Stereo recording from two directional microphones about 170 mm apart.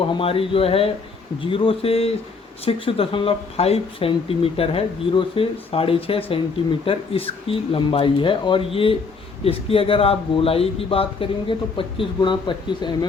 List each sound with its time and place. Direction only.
0.1 s speech: 30° left (ahead or behind)